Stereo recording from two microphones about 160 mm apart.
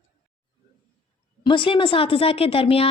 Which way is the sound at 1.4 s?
30° left (ahead or behind).